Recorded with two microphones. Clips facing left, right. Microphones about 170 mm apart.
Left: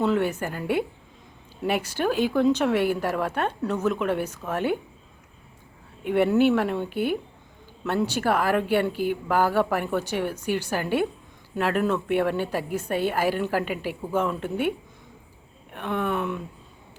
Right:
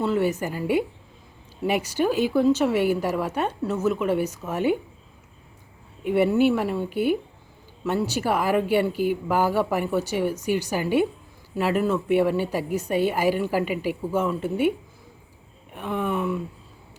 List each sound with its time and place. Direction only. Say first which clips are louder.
0.0 s speech: even; 5° right (ahead or behind)
6.1 s speech: even; 5° right (ahead or behind)
15.7 s speech: even; 5° right (ahead or behind)